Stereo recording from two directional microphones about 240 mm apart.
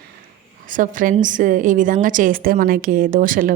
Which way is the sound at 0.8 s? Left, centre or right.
Right.